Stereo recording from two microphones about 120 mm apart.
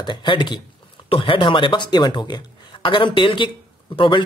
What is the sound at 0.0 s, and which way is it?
Speech, 40° left (ahead or behind).